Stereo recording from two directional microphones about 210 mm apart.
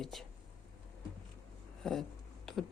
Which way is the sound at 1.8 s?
Centre (ahead or behind).